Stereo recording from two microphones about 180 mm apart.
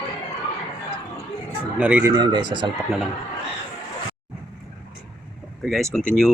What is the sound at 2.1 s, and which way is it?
Speech, 25° right (ahead or behind).